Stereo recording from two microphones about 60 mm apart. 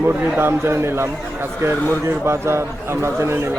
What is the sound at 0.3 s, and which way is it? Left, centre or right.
A man's voice, right.